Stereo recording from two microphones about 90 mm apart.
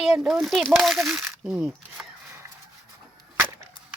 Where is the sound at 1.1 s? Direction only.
10° right (ahead or behind).